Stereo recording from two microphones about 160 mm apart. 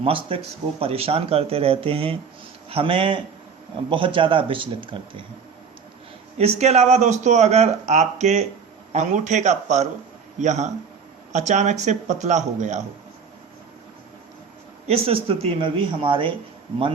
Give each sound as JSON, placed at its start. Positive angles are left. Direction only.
{"t": 0.0, "sound": "speech", "side_deg": -35}
{"t": 6.4, "sound": "speech", "side_deg": -40}
{"t": 14.8, "sound": "speech", "side_deg": -35}